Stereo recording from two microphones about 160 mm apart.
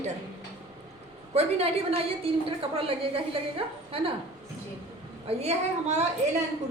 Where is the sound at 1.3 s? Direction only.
40° right (ahead or behind).